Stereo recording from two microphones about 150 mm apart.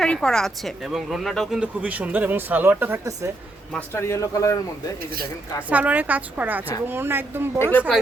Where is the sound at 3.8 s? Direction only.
15° left (ahead or behind).